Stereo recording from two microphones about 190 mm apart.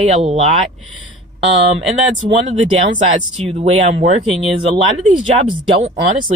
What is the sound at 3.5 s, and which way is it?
Speech, 30° right (ahead or behind).